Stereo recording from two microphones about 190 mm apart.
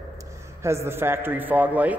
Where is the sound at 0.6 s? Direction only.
15° right (ahead or behind).